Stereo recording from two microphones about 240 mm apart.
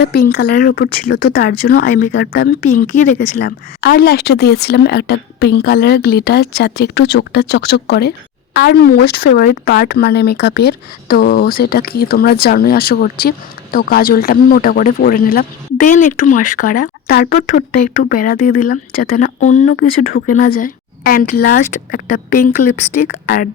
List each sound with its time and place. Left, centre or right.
0.0 s speech: left
2.6 s speech: left
3.2 s speech: left